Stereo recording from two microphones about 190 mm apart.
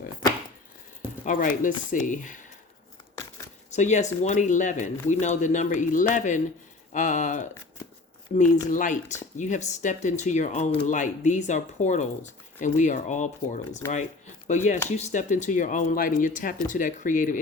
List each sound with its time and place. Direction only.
1.2 s speech: 45° left (ahead or behind)
3.7 s speech: 40° left (ahead or behind)
8.7 s speech: 40° left (ahead or behind)